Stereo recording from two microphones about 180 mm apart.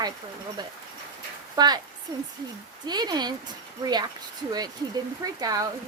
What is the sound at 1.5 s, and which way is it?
Speech, 20° right (ahead or behind).